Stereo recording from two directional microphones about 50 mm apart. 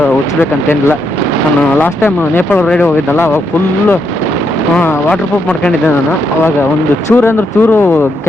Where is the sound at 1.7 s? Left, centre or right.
Left.